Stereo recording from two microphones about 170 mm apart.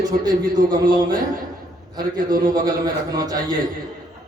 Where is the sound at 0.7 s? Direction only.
25° right (ahead or behind).